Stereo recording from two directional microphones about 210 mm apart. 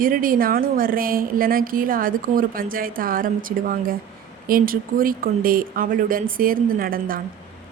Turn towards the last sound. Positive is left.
turn(degrees=-45)  # may be behind; listen again after turning